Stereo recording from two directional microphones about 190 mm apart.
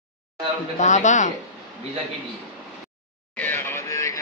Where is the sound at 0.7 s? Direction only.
40° left (ahead or behind).